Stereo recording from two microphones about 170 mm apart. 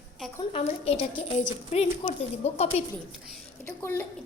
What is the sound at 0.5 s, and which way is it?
A child's voice, 35° left (ahead or behind).